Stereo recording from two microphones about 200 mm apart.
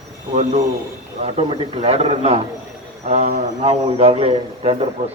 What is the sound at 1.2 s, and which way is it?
A man's voice, 30° right (ahead or behind).